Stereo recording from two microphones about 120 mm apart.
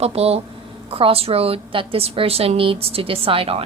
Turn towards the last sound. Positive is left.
turn(degrees=-50)  # may be behind; listen again after turning